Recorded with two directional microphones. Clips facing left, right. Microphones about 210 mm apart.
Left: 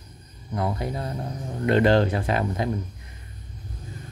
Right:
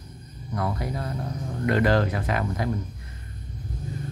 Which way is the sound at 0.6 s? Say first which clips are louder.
Left 2 dB; 25° left (ahead or behind).